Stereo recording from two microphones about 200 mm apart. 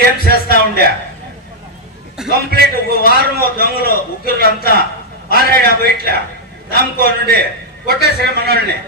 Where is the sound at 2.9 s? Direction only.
50° left (ahead or behind).